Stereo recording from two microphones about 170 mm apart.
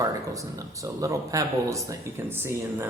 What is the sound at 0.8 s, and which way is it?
Speech, 20° right (ahead or behind).